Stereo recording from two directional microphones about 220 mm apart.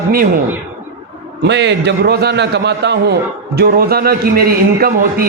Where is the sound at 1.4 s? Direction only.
50° right (ahead or behind).